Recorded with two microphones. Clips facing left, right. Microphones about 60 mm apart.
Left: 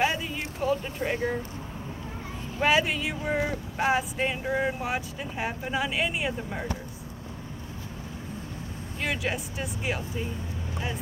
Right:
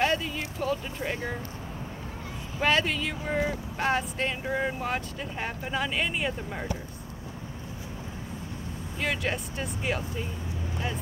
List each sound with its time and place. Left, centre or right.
0.0 s a sound: centre
2.6 s speech: centre
9.0 s speech: centre